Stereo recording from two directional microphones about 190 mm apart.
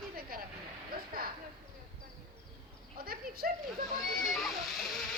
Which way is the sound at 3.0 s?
50° right (ahead or behind).